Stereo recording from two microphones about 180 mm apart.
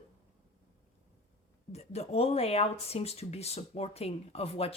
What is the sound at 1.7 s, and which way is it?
Speech, 35° left (ahead or behind).